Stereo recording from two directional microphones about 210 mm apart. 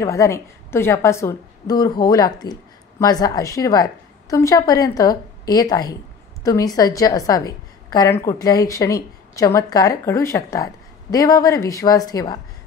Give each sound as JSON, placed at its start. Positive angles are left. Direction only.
{"t": 0.0, "sound": "a woman's voice", "side_deg": 15}